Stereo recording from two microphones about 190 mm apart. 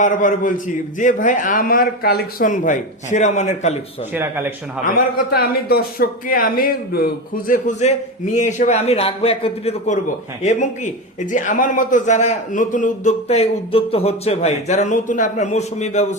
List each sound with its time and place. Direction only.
0.0 s a man's voice: 45° left (ahead or behind)
4.1 s a man's voice: 10° right (ahead or behind)
4.9 s a man's voice: 50° left (ahead or behind); by 16.0 s 35° left (ahead or behind)